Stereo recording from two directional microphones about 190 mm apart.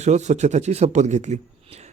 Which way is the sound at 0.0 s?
35° right (ahead or behind).